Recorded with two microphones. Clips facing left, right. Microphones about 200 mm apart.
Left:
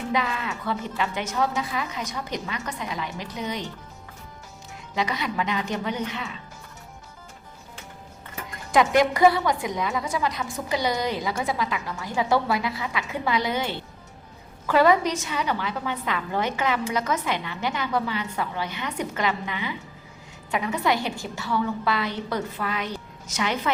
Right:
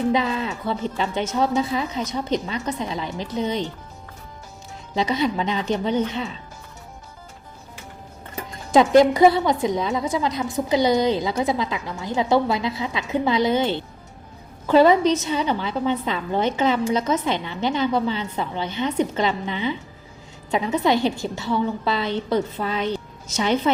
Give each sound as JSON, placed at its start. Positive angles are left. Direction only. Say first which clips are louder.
{"t": 0.1, "sound": "a woman's voice", "louder": "right 5 dB", "side_deg": -30}
{"t": 4.9, "sound": "a woman's voice", "louder": "right 5 dB", "side_deg": -25}
{"t": 8.7, "sound": "a woman's voice", "louder": "right 6 dB", "side_deg": -30}